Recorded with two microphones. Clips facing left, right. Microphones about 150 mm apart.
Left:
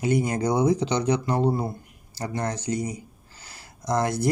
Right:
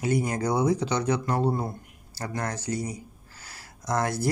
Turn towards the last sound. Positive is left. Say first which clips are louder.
# left 3 dB
turn(degrees=20)  # may be behind; listen again after turning